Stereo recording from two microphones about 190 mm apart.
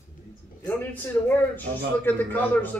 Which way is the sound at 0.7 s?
10° left (ahead or behind).